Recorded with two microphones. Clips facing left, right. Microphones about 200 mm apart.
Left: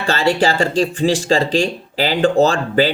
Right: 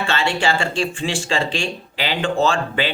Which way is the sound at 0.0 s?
35° left (ahead or behind).